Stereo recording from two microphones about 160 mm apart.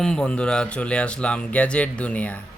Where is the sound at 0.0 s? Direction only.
5° left (ahead or behind).